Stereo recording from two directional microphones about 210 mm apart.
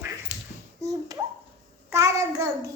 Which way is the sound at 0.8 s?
15° right (ahead or behind).